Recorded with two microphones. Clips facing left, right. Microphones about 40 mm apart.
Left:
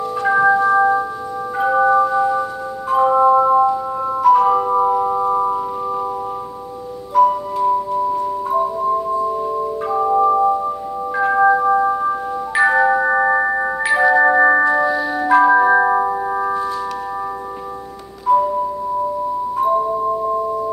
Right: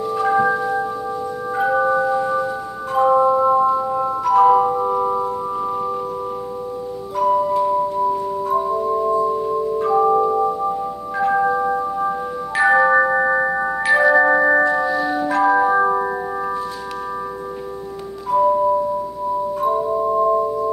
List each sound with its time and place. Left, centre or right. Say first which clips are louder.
0.2 s music: left 4 dB; centre
0.7 s singing bowl: left 9 dB; centre
1.6 s music: left 3 dB; centre
3.3 s a sound: left 3 dB; centre
3.6 s music: even; centre
7.2 s music: left 2 dB; centre
11.4 s doorbell: left 5 dB; centre
12.0 s glockenspiel: left 2 dB; centre
18.2 s music: left 1 dB; centre